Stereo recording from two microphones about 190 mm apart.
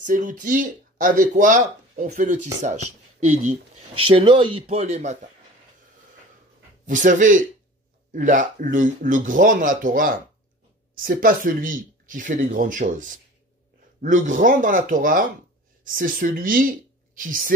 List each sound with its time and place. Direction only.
0.0 s speech: 45° right (ahead or behind)
6.9 s speech: 40° right (ahead or behind)